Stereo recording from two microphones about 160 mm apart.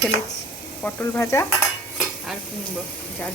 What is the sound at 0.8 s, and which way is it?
Speech, 15° left (ahead or behind).